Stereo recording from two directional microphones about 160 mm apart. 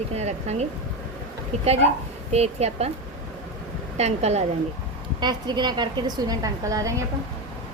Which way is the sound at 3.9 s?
40° right (ahead or behind).